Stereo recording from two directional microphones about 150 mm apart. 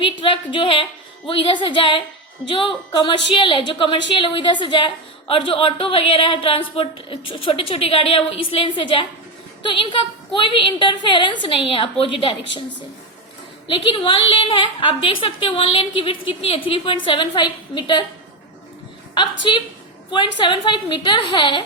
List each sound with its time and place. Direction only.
0.0 s a woman's voice: 35° left (ahead or behind)
13.7 s a woman's voice: 35° left (ahead or behind)
19.1 s a woman's voice: 30° left (ahead or behind)